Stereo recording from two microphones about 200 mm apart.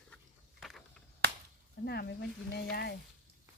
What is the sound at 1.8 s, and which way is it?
Speech, 55° left (ahead or behind).